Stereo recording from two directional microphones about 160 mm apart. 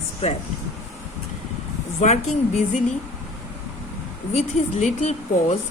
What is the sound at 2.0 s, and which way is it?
Speech, 45° left (ahead or behind).